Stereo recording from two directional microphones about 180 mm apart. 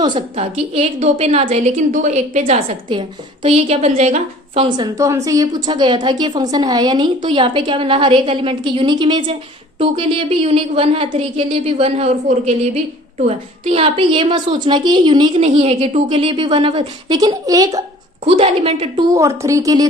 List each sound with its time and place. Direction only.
0.3 s a woman's voice: 35° right (ahead or behind)
4.9 s a woman's voice: 15° right (ahead or behind)
18.3 s a woman's voice: 35° right (ahead or behind)
19.1 s a woman's voice: 15° right (ahead or behind)